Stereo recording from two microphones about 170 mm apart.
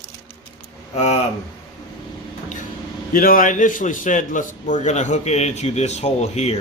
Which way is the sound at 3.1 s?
55° left (ahead or behind).